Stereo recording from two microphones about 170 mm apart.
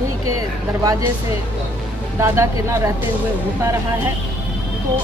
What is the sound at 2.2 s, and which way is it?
Speech, 15° right (ahead or behind).